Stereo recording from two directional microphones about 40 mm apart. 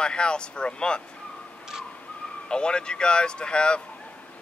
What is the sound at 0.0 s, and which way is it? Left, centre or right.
Speech, left.